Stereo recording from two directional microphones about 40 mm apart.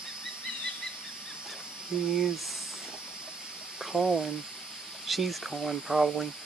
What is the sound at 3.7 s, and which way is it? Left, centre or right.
Speech, centre.